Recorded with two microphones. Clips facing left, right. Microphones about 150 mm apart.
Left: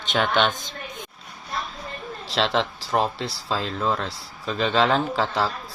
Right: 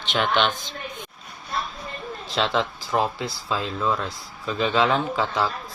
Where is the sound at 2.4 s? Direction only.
35° left (ahead or behind).